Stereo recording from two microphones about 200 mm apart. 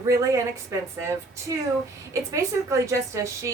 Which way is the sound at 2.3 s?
15° right (ahead or behind).